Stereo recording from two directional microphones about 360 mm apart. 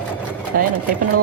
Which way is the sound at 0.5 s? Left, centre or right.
Right.